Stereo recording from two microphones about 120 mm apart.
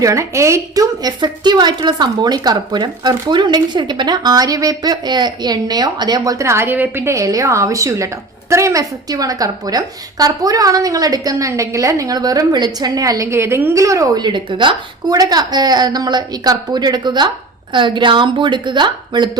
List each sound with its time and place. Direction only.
0.0 s a woman's voice: 25° right (ahead or behind)